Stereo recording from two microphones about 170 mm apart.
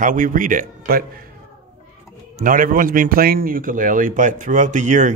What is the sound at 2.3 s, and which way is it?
A man's voice, 55° right (ahead or behind).